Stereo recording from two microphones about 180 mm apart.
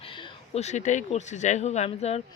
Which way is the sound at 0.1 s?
30° left (ahead or behind).